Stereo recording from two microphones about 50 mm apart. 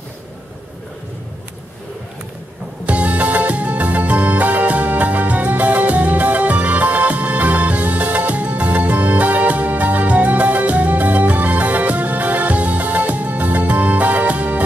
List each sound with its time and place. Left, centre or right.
2.9 s music: right